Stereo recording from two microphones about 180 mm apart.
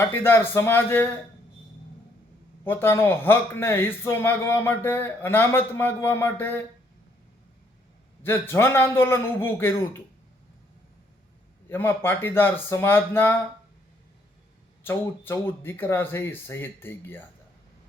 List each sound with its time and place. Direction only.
0.0 s a man's voice: 15° left (ahead or behind)
2.6 s a man's voice: 10° left (ahead or behind)
8.2 s a man's voice: 10° left (ahead or behind)
11.7 s a man's voice: 15° left (ahead or behind)
14.8 s a man's voice: 10° left (ahead or behind)